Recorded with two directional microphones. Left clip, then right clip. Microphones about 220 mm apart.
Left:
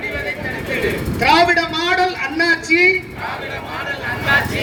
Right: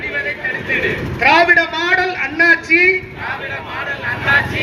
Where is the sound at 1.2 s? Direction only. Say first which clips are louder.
Right 2 dB; 60° left (ahead or behind).